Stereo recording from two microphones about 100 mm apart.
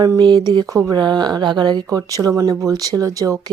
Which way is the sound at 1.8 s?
35° right (ahead or behind).